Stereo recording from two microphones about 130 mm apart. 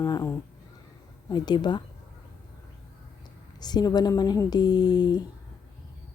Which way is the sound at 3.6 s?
30° left (ahead or behind).